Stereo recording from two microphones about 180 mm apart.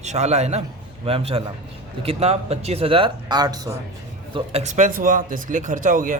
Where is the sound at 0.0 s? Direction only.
40° right (ahead or behind); by 3.8 s 20° right (ahead or behind).